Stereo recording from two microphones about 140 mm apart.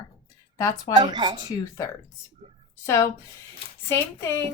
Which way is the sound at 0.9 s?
30° right (ahead or behind).